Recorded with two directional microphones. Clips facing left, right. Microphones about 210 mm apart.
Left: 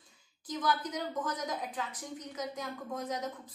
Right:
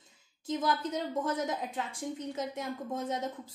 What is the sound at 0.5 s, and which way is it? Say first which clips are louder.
A woman's voice: right 2 dB; 25° right (ahead or behind).